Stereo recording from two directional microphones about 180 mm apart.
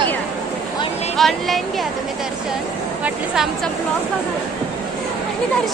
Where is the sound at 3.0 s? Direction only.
5° right (ahead or behind).